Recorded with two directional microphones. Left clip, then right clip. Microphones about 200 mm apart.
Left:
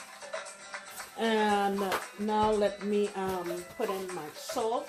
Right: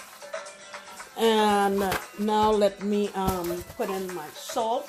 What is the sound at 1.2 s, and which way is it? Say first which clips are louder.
Speech: right 6 dB; 55° right (ahead or behind).